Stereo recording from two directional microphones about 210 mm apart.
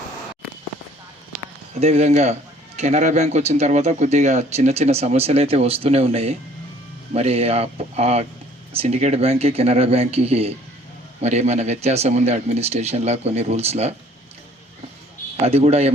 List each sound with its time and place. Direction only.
1.8 s speech: 30° right (ahead or behind)
15.4 s speech: 30° right (ahead or behind)